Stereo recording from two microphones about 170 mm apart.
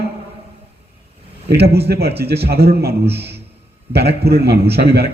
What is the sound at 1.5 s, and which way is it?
A man's voice, 70° right (ahead or behind).